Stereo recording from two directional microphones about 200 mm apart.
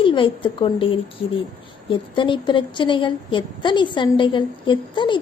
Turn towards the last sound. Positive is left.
turn(degrees=25)  # may be behind; listen again after turning